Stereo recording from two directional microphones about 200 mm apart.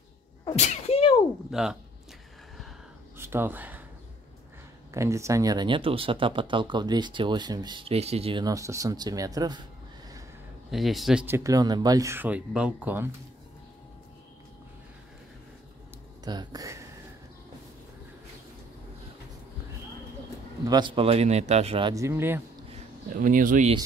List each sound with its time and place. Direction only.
0.6 s sneeze: 30° left (ahead or behind)
1.5 s speech: 5° right (ahead or behind)
3.2 s a sound: 10° right (ahead or behind)
4.9 s speech: 15° right (ahead or behind)
10.7 s speech: centre (ahead or behind)
16.3 s speech: 20° right (ahead or behind)
20.6 s speech: 20° right (ahead or behind)
23.2 s speech: 40° right (ahead or behind)